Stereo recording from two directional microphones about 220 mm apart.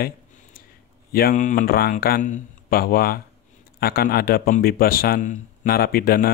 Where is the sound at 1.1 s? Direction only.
45° left (ahead or behind).